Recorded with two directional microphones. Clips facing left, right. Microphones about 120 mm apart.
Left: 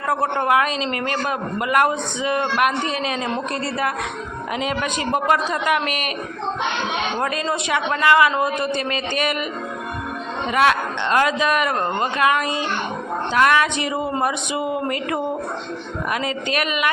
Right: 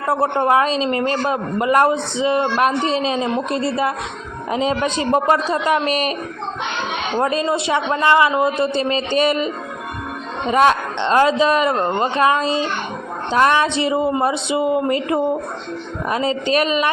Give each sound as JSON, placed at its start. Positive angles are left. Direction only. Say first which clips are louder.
{"t": 0.1, "sound": "a man's voice", "louder": "right 3 dB", "side_deg": -30}
{"t": 7.2, "sound": "a man's voice", "louder": "right 4 dB", "side_deg": -25}
{"t": 10.5, "sound": "a man's voice", "louder": "right 3 dB", "side_deg": -30}